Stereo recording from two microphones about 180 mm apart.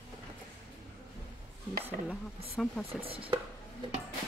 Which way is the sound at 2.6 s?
Centre (ahead or behind).